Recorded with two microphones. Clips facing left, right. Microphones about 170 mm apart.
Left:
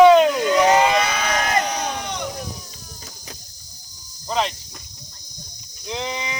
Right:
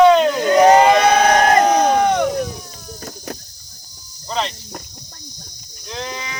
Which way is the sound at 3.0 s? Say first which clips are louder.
Right 13 dB; 55° right (ahead or behind).